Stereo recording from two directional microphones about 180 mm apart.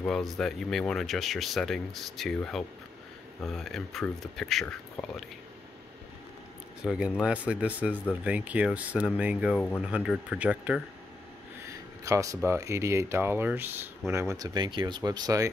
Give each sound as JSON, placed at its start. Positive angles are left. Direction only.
{"t": 0.0, "sound": "speech", "side_deg": 5}
{"t": 6.8, "sound": "speech", "side_deg": -5}
{"t": 12.0, "sound": "speech", "side_deg": -15}